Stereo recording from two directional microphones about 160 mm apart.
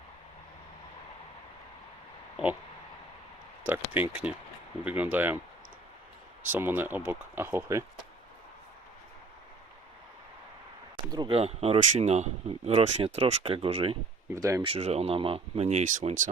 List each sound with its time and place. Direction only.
2.3 s oink: 10° right (ahead or behind)
3.7 s speech: 10° right (ahead or behind)
6.5 s speech: 15° right (ahead or behind)
10.9 s a sound: 30° right (ahead or behind)
11.3 s speech: 40° right (ahead or behind)
14.3 s speech: 20° right (ahead or behind)
14.6 s speech: 35° right (ahead or behind); by 16.3 s 50° right (ahead or behind)